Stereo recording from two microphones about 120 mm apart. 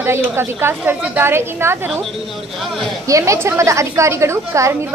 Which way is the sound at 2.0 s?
Centre (ahead or behind).